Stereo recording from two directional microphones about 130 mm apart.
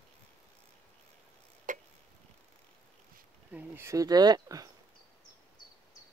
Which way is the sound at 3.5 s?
20° right (ahead or behind).